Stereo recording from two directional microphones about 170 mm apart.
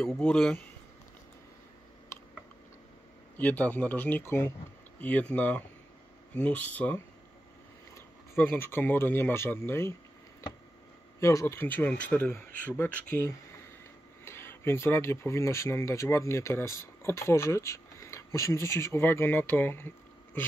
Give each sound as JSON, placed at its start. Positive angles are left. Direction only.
{"t": 0.0, "sound": "speech", "side_deg": 5}
{"t": 3.3, "sound": "speech", "side_deg": 10}
{"t": 8.4, "sound": "speech", "side_deg": 15}
{"t": 11.1, "sound": "speech", "side_deg": 15}